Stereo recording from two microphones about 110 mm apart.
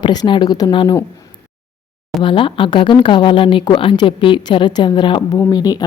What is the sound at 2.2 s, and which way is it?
A woman's voice, 50° left (ahead or behind).